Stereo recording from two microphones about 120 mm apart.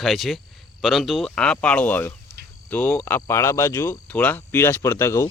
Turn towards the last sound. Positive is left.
turn(degrees=25)  # may be behind; listen again after turning